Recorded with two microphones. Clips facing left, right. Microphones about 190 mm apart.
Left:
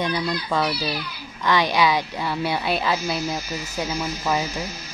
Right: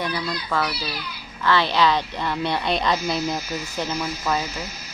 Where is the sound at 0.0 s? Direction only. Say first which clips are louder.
Left 3 dB; 20° left (ahead or behind).